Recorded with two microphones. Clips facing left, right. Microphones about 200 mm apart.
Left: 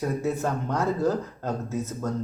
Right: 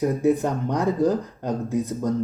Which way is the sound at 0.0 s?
15° right (ahead or behind).